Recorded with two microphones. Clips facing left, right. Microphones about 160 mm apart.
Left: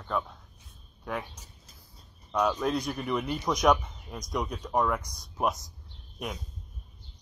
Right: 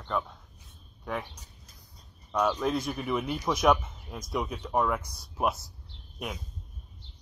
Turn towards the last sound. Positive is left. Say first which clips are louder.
# even
turn(degrees=0)  # may be behind; listen again after turning